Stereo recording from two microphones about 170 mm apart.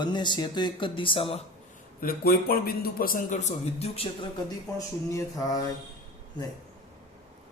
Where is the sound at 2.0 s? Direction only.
60° left (ahead or behind); by 4.3 s 35° left (ahead or behind).